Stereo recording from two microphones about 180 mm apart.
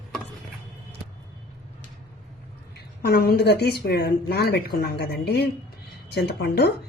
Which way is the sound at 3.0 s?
60° left (ahead or behind).